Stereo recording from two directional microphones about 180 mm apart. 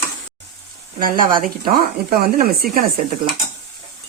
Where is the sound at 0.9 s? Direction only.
50° right (ahead or behind).